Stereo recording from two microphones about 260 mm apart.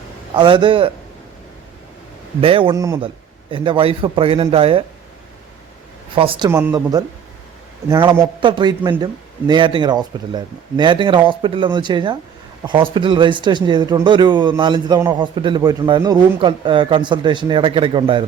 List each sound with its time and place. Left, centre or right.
0.3 s a man's voice: centre
2.4 s a man's voice: right
6.1 s speech: centre